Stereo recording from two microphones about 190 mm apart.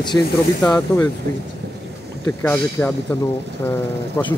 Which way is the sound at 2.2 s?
10° left (ahead or behind).